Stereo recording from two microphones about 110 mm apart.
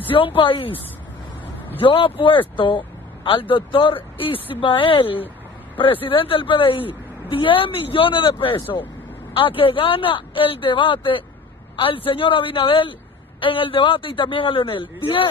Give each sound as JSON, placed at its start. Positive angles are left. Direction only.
{"t": 0.1, "sound": "speech", "side_deg": 55}